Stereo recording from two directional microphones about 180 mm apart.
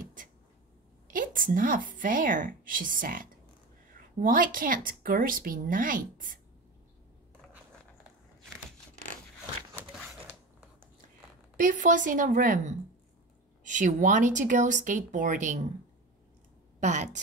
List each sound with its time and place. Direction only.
1.1 s speech: 50° right (ahead or behind)
11.5 s speech: 45° right (ahead or behind)
16.8 s a woman's voice: 40° right (ahead or behind)